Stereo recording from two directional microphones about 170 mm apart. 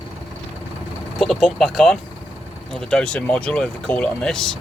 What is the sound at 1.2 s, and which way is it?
Speech, centre (ahead or behind).